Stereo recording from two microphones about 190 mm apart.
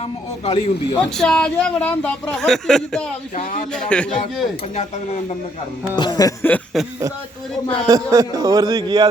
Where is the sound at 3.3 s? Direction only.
40° left (ahead or behind).